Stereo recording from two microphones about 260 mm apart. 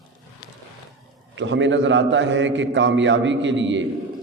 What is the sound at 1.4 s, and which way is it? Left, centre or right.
A man's voice, right.